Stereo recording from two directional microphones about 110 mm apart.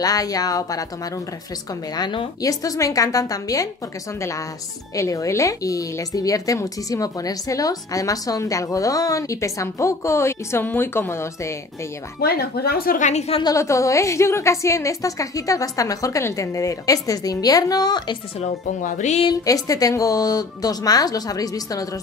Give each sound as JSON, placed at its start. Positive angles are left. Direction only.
{"t": 0.0, "sound": "speech", "side_deg": 35}
{"t": 2.0, "sound": "speech", "side_deg": 40}
{"t": 4.9, "sound": "speech", "side_deg": 30}
{"t": 13.0, "sound": "a woman's voice", "side_deg": 90}
{"t": 13.4, "sound": "speech", "side_deg": 30}
{"t": 18.9, "sound": "a woman's voice", "side_deg": 90}
{"t": 19.4, "sound": "speech", "side_deg": 35}